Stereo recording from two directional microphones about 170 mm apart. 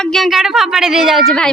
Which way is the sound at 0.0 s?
Centre (ahead or behind).